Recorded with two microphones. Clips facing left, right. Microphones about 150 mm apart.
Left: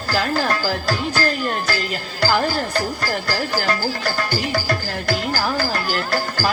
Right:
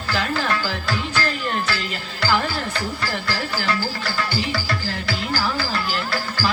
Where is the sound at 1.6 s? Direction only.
40° left (ahead or behind).